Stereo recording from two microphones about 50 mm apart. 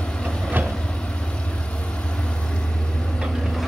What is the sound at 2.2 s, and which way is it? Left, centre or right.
Vehicle, centre.